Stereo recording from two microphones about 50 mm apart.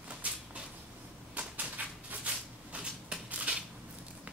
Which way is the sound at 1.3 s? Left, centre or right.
Right.